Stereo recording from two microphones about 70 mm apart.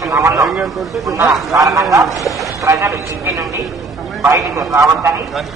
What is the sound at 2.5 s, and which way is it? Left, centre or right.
A man's voice, right.